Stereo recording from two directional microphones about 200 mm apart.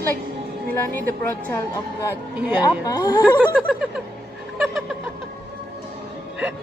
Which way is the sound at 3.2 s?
5° right (ahead or behind).